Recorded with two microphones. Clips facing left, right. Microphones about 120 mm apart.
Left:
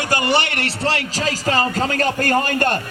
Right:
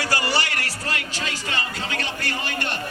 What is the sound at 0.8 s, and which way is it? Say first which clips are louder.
A man's voice: left 10 dB; 35° left (ahead or behind).